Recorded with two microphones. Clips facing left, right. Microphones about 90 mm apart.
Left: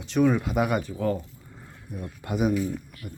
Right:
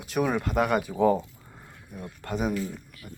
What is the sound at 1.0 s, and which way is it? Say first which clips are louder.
Speech: right 5 dB; 15° right (ahead or behind).